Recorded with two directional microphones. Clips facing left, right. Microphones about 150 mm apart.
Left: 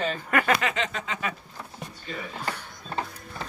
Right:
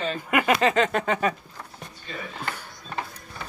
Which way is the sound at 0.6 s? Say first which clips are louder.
Right 8 dB; 45° right (ahead or behind).